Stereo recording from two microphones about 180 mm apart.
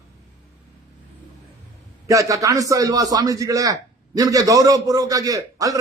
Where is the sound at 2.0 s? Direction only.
20° right (ahead or behind).